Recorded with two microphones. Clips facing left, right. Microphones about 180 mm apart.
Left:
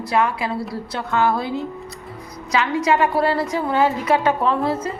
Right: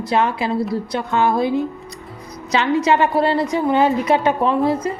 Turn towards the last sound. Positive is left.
turn(degrees=-15)  # may be behind; listen again after turning